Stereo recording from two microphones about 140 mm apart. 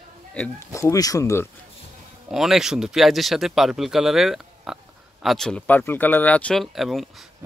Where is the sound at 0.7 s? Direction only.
20° left (ahead or behind).